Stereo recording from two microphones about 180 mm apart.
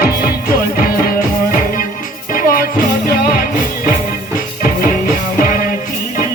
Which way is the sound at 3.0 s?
55° left (ahead or behind).